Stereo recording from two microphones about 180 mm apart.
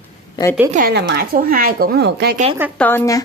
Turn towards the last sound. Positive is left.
turn(degrees=15)  # may be behind; listen again after turning